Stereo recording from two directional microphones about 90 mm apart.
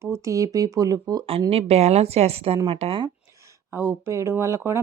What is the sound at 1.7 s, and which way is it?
Speech, 90° right.